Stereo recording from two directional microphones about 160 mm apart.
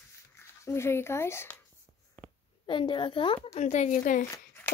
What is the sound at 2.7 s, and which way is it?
Speech, 30° left (ahead or behind).